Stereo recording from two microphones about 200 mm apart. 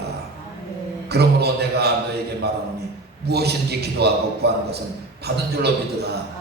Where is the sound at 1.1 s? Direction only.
55° right (ahead or behind).